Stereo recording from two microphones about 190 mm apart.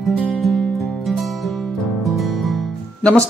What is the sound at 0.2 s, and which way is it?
Music, centre (ahead or behind).